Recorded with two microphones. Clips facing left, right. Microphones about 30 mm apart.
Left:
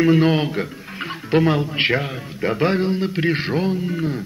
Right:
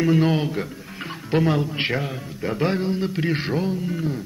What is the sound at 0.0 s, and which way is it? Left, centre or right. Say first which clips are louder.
Speech: left 4 dB; left.